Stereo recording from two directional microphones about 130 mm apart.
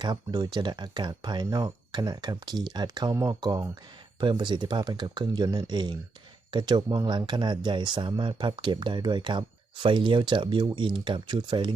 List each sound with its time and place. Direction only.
0.0 s speech: 35° right (ahead or behind)